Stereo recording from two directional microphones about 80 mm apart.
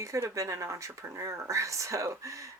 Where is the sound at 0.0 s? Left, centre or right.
Right.